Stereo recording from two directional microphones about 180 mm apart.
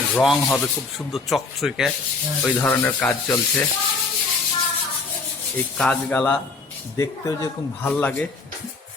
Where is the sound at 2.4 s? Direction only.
10° left (ahead or behind).